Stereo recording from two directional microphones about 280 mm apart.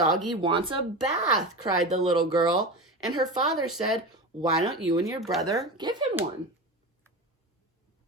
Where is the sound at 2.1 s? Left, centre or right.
Centre.